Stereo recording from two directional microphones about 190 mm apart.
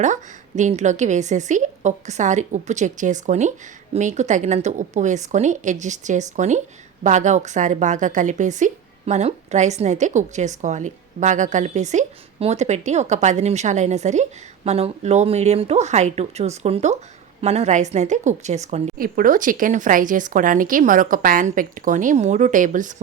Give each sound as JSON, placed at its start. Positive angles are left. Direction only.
{"t": 0.0, "sound": "a woman's voice", "side_deg": -40}
{"t": 18.9, "sound": "speech", "side_deg": -50}